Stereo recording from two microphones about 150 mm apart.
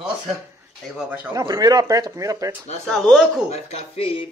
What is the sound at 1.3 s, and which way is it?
Speech, 25° right (ahead or behind).